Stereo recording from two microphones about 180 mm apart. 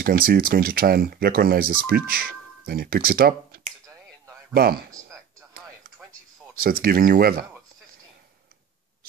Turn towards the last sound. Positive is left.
turn(degrees=-55)  # may be behind; listen again after turning